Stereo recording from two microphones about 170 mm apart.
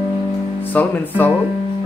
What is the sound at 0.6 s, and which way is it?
Speech, 10° left (ahead or behind).